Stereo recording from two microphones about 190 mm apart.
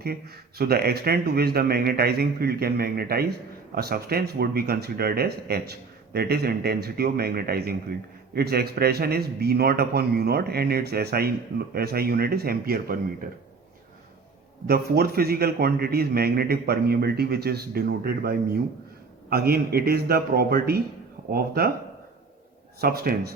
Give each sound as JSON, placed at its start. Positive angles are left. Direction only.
{"t": 0.6, "sound": "a man's voice", "side_deg": -55}
{"t": 14.7, "sound": "a man's voice", "side_deg": -55}
{"t": 22.8, "sound": "a man's voice", "side_deg": -55}